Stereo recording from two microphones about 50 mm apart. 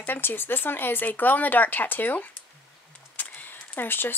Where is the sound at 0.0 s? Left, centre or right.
Left.